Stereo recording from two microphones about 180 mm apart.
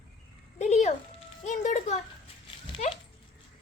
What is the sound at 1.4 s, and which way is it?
Music, 40° left (ahead or behind).